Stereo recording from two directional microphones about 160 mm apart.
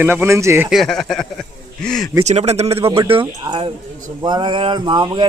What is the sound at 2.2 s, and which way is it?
Speech, 45° right (ahead or behind).